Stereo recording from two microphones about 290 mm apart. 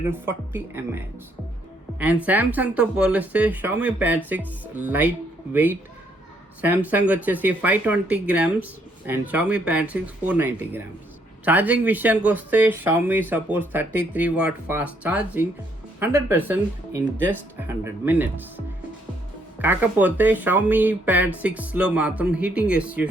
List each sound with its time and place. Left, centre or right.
0.1 s speech: centre
2.2 s speech: centre
6.6 s speech: centre